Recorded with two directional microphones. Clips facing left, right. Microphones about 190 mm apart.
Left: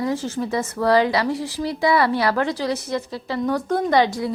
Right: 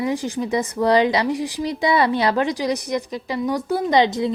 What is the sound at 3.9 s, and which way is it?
Speech, 20° right (ahead or behind).